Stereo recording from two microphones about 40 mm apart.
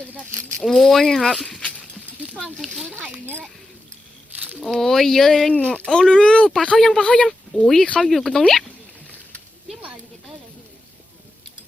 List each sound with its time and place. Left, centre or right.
0.6 s speech: centre
1.5 s speech: centre
2.1 s a sound: right
4.3 s a sound: right
4.7 s speech: centre
5.5 s speech: left
5.9 s speech: centre
7.0 s speech: left
8.0 s speech: centre